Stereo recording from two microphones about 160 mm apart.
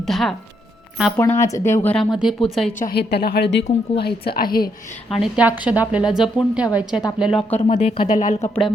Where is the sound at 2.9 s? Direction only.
80° left.